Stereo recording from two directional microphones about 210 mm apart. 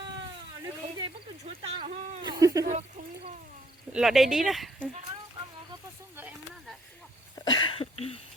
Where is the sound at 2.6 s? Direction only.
35° right (ahead or behind).